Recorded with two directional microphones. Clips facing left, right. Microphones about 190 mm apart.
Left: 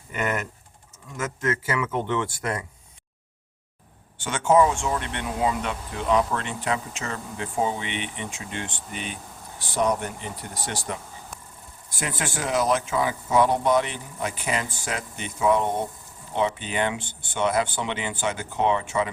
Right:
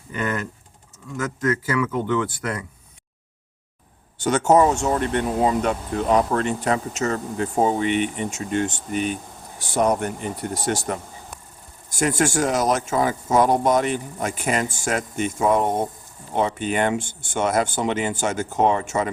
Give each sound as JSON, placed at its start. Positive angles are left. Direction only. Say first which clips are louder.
{"t": 0.1, "sound": "typing", "louder": "right 1 dB", "side_deg": 20}
{"t": 1.1, "sound": "speech", "louder": "right 4 dB", "side_deg": 25}
{"t": 4.2, "sound": "speech", "louder": "right 3 dB", "side_deg": -40}